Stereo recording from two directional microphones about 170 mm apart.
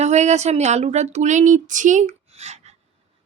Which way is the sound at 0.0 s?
40° right (ahead or behind).